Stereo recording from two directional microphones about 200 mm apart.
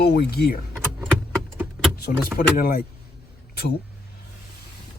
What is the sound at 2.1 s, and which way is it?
Speech, 45° left (ahead or behind).